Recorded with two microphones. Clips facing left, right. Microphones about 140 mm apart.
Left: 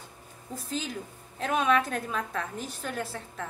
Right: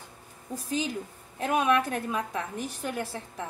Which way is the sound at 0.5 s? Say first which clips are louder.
Right 4 dB; 15° right (ahead or behind).